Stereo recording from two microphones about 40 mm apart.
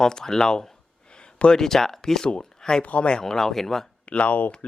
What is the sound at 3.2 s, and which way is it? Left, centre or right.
Speech, centre.